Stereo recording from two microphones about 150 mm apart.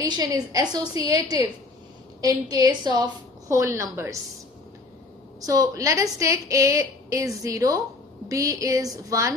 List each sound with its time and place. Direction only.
0.1 s a woman's voice: 25° right (ahead or behind)
5.4 s a woman's voice: 20° right (ahead or behind)